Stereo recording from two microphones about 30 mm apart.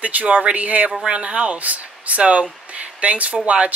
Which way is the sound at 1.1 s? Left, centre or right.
Right.